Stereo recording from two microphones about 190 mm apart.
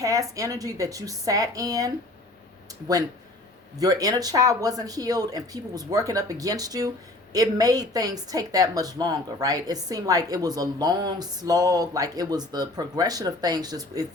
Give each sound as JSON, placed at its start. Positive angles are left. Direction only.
{"t": 0.0, "sound": "a woman's voice", "side_deg": -15}
{"t": 3.8, "sound": "a woman's voice", "side_deg": -20}